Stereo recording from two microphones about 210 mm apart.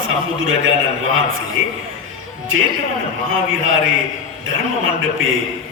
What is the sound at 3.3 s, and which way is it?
A man's voice, 70° right (ahead or behind).